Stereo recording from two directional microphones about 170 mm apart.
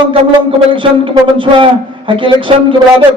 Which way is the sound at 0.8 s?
30° right (ahead or behind).